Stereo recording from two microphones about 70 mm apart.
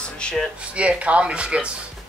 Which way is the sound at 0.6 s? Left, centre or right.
Centre.